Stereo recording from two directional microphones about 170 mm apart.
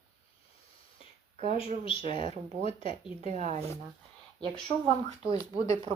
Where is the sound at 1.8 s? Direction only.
30° left (ahead or behind).